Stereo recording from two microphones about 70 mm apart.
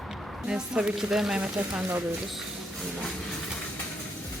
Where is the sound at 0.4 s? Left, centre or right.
Centre.